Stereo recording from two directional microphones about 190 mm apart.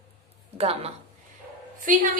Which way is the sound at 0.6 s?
30° right (ahead or behind).